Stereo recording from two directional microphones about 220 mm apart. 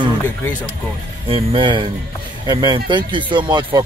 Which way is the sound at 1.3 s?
25° right (ahead or behind).